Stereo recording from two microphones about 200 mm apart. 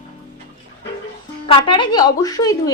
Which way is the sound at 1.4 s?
25° left (ahead or behind).